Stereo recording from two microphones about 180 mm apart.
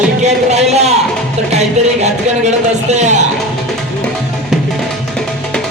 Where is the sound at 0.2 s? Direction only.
40° right (ahead or behind).